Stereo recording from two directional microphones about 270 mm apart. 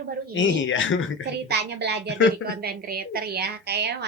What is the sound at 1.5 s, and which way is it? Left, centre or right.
A woman's voice, right.